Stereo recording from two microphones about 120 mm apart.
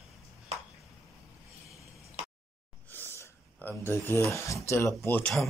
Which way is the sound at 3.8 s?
20° left (ahead or behind).